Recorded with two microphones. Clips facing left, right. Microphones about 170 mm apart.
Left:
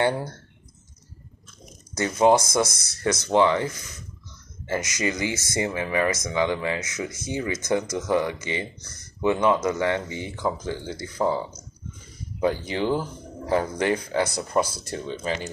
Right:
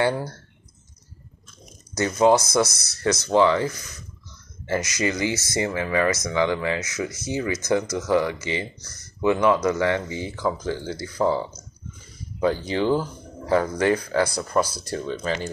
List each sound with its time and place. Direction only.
0.0 s speech: 20° left (ahead or behind)
2.0 s speech: 20° left (ahead or behind)
12.6 s speech: 20° left (ahead or behind)